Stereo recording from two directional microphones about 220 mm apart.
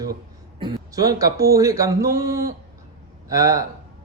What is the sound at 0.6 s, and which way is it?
Speech, 15° right (ahead or behind).